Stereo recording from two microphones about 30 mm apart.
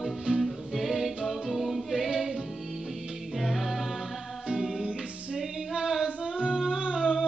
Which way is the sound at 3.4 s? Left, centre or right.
Centre.